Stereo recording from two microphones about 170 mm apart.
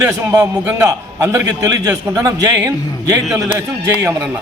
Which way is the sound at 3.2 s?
Centre (ahead or behind).